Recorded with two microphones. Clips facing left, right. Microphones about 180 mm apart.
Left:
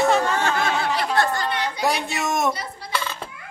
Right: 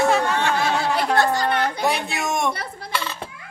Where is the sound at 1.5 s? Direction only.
55° right (ahead or behind).